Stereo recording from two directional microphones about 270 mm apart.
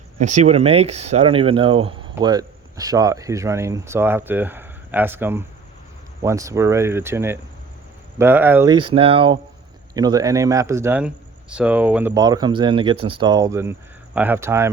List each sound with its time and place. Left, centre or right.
0.4 s speech: right